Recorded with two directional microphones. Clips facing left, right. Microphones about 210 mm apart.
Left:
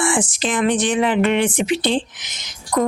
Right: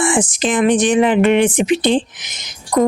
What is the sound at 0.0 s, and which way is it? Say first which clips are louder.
A woman's voice: right 4 dB; 15° right (ahead or behind).